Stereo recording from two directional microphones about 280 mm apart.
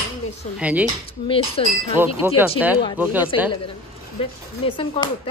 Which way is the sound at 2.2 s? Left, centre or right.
Centre.